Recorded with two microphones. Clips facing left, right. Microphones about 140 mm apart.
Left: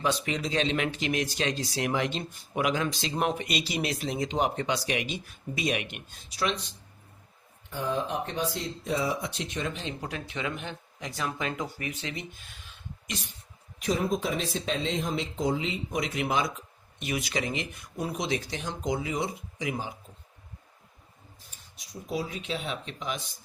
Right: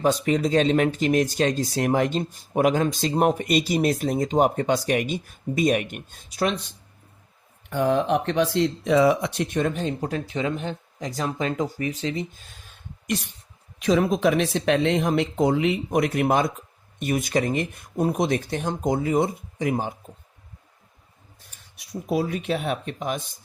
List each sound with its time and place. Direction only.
0.3 s speech: 45° right (ahead or behind)
7.7 s speech: 70° right (ahead or behind); by 12.7 s 40° right (ahead or behind)
13.1 s a sound: 60° right (ahead or behind)
13.7 s speech: 90° right; by 19.9 s 50° right (ahead or behind)
22.1 s speech: 55° right (ahead or behind)